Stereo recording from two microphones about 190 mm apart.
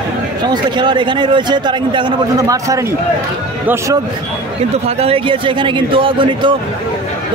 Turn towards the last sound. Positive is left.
turn(degrees=-25)  # may be behind; listen again after turning